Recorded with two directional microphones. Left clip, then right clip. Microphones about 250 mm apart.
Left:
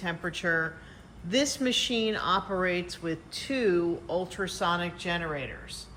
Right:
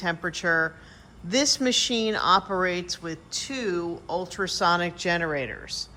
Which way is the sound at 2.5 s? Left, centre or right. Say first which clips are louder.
Right 3 dB; centre.